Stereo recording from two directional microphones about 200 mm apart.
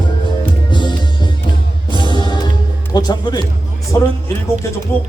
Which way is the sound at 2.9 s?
20° left (ahead or behind).